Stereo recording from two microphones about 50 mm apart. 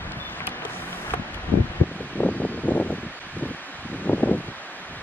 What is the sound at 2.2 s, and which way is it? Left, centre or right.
Wind, left.